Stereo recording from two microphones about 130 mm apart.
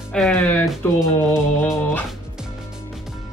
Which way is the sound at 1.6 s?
15° left (ahead or behind).